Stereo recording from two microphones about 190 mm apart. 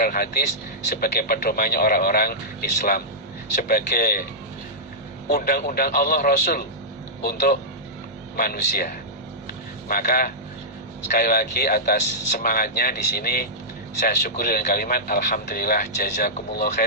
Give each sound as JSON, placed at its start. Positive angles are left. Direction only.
{"t": 0.0, "sound": "speech", "side_deg": 50}
{"t": 5.3, "sound": "speech", "side_deg": 55}
{"t": 9.9, "sound": "speech", "side_deg": 50}